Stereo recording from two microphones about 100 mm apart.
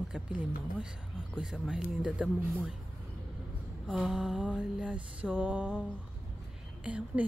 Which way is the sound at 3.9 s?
10° right (ahead or behind).